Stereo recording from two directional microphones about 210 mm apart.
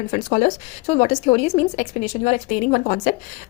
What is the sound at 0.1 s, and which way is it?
A woman's voice, 35° left (ahead or behind).